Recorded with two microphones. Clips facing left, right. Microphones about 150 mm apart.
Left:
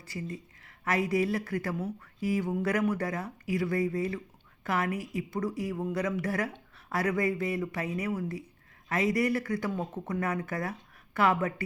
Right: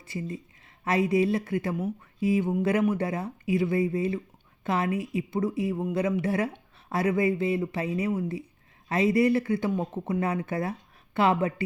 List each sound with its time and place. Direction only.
0.1 s speech: 25° right (ahead or behind)